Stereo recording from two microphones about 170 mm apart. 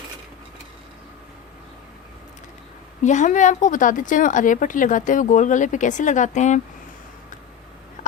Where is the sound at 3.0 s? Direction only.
45° left (ahead or behind).